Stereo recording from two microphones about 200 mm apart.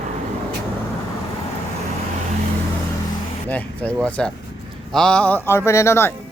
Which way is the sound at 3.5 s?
5° left (ahead or behind).